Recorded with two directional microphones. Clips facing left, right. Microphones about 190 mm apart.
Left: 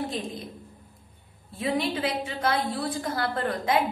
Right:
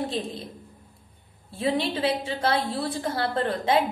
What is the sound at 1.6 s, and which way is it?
A woman's voice, 30° right (ahead or behind).